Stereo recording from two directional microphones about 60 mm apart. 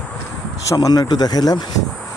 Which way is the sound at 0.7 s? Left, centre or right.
Left.